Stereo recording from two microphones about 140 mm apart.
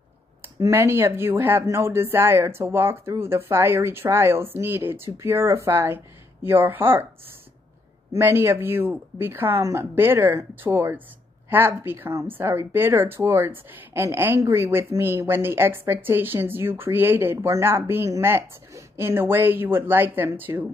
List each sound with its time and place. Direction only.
0.4 s speech: 15° right (ahead or behind)
8.1 s speech: 15° right (ahead or behind)